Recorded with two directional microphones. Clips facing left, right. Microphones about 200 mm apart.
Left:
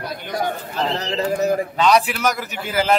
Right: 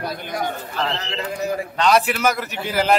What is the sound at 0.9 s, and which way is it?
Speech, 40° left (ahead or behind).